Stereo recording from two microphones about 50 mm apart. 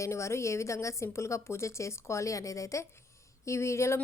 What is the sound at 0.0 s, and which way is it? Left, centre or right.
A woman's voice, left.